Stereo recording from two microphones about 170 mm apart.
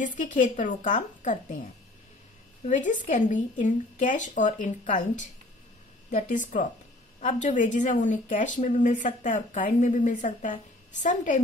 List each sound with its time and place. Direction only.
0.0 s a woman's voice: 50° left (ahead or behind)
2.6 s a woman's voice: 50° left (ahead or behind)